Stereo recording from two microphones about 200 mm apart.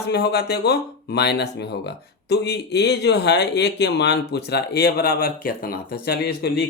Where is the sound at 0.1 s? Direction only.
55° left (ahead or behind).